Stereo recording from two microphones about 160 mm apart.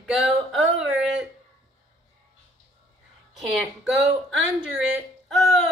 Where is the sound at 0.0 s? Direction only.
Centre (ahead or behind).